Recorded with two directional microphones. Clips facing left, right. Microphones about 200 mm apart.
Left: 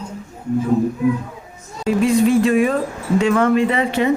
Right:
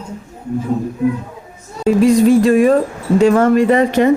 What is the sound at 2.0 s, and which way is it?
Music, 40° right (ahead or behind).